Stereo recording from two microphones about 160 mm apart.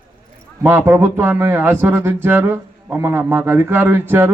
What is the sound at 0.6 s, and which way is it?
Speech, 15° right (ahead or behind).